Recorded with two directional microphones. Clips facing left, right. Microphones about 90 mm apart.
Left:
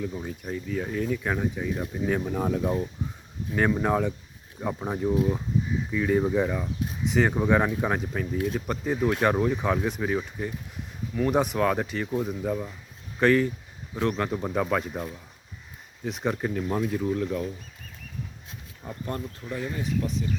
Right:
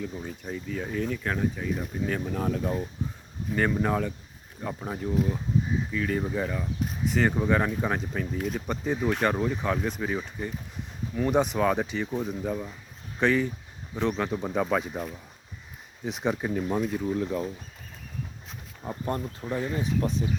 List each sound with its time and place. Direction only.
0.0 s speech: 5° left (ahead or behind)
10.0 s speech: centre (ahead or behind)
17.1 s speech: 15° right (ahead or behind)
18.8 s speech: 25° right (ahead or behind)